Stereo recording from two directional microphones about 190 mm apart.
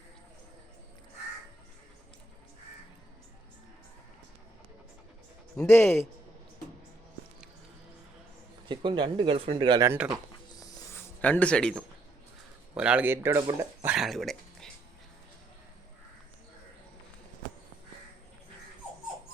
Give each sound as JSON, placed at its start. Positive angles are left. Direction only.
{"t": 5.5, "sound": "speech", "side_deg": 10}
{"t": 8.7, "sound": "speech", "side_deg": -25}
{"t": 11.2, "sound": "speech", "side_deg": 5}
{"t": 12.7, "sound": "speech", "side_deg": -5}